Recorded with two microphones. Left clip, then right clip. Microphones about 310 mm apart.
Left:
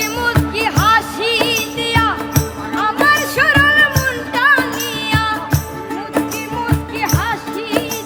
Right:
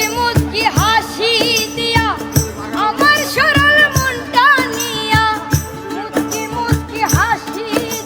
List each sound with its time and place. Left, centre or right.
0.0 s music: centre